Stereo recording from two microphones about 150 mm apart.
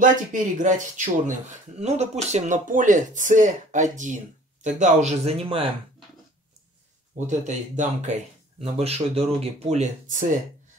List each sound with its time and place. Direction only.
0.0 s a man's voice: 60° right (ahead or behind); by 5.7 s 40° right (ahead or behind)
7.2 s speech: 50° right (ahead or behind)